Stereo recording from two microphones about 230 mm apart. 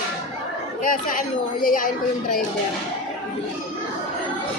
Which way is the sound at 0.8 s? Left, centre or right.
Left.